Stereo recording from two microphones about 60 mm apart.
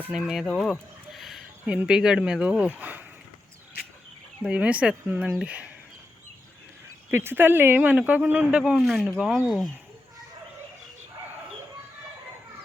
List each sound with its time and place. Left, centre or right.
0.1 s speech: centre
0.4 s a sound: centre
1.6 s speech: centre
2.4 s speech: right
4.4 s speech: right
7.1 s speech: right
7.8 s speech: right
8.8 s speech: centre